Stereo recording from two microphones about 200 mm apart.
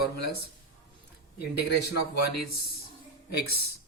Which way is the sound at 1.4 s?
55° left (ahead or behind).